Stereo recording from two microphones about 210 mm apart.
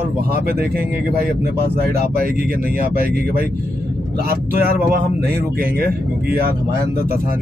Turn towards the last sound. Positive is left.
turn(degrees=-45)  # may be behind; listen again after turning